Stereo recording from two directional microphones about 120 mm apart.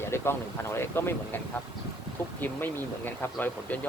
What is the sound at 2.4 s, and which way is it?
Speech, 15° left (ahead or behind).